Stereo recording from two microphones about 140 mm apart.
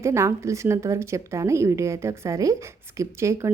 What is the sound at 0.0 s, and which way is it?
A woman's voice, 20° right (ahead or behind).